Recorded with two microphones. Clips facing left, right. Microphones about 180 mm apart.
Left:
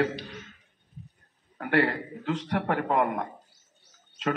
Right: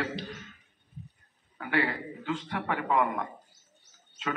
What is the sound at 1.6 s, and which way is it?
A man's voice, 45° left (ahead or behind).